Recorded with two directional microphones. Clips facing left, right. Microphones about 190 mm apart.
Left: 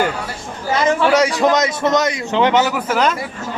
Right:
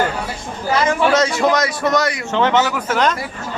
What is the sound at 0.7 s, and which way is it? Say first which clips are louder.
A man's voice: left 1 dB; 20° left (ahead or behind).